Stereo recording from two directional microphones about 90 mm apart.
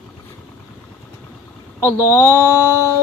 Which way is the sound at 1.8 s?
25° right (ahead or behind).